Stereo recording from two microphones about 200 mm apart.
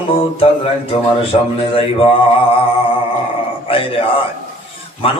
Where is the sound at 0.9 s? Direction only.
30° left (ahead or behind).